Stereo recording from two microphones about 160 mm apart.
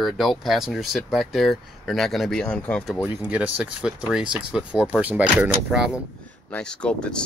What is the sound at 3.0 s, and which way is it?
Speech, 10° right (ahead or behind).